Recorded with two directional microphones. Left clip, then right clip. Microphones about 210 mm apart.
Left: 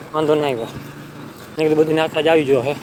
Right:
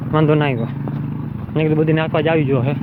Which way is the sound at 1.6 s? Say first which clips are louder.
Left 2 dB; 40° left (ahead or behind).